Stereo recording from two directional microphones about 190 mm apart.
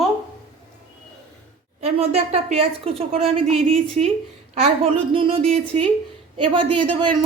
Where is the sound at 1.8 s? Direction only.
35° right (ahead or behind).